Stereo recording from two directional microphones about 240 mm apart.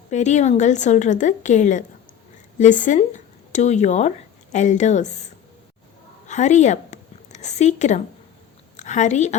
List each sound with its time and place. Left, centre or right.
0.1 s a woman's voice: left
6.2 s a woman's voice: left